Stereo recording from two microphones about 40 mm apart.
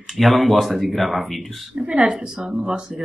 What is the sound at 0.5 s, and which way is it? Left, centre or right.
Speech, centre.